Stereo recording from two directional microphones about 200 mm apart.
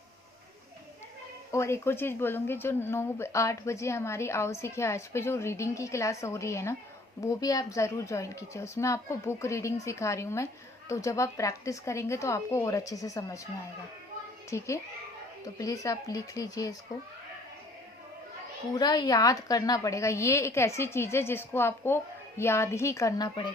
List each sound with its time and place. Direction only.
1.5 s speech: 15° left (ahead or behind)
14.5 s speech: 15° left (ahead or behind)
18.7 s speech: 20° left (ahead or behind)